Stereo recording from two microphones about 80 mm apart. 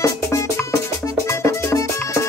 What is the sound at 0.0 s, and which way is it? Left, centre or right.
Music, left.